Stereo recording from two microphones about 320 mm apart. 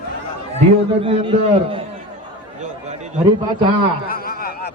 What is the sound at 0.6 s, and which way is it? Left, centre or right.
A man's voice, centre.